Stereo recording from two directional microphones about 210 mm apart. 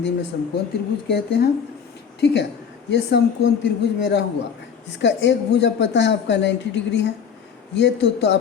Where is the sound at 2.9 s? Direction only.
55° left (ahead or behind).